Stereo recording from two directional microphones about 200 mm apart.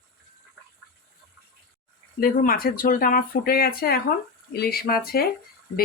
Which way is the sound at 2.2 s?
45° left (ahead or behind).